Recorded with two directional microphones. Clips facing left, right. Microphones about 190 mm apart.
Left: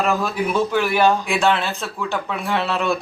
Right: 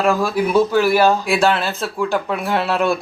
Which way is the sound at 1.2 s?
35° right (ahead or behind).